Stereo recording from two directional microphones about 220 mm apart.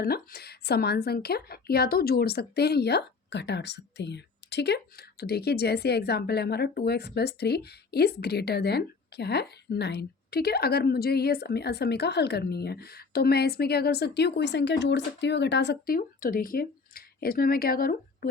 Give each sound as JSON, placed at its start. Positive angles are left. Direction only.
{"t": 0.0, "sound": "speech", "side_deg": 45}